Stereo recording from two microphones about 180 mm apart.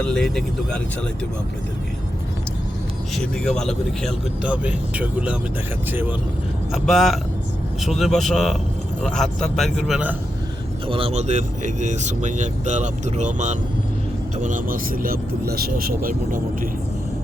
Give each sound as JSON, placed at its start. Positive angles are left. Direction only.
{"t": 0.0, "sound": "speech", "side_deg": 5}
{"t": 3.2, "sound": "speech", "side_deg": 5}
{"t": 6.7, "sound": "speech", "side_deg": 0}
{"t": 10.8, "sound": "speech", "side_deg": -30}